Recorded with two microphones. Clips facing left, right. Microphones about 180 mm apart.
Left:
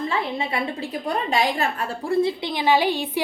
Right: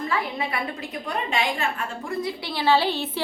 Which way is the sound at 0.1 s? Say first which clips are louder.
Left 2 dB; 25° left (ahead or behind).